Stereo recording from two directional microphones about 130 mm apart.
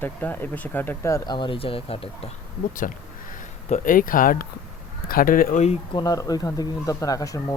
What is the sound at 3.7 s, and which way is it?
Speech, 90° left.